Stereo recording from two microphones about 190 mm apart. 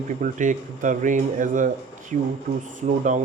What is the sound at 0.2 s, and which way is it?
Speech, 40° right (ahead or behind).